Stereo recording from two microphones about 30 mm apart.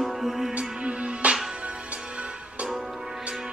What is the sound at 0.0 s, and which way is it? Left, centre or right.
Music, centre.